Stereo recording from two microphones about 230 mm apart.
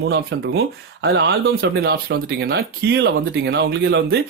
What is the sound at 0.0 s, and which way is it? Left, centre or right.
Speech, right.